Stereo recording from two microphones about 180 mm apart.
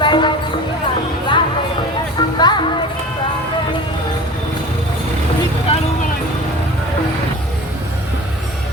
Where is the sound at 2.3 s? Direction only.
25° left (ahead or behind).